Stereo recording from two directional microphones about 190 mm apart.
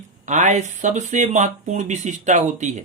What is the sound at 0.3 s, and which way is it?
Speech, 40° right (ahead or behind).